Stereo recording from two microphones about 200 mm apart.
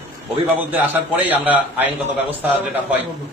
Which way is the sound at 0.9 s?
10° right (ahead or behind).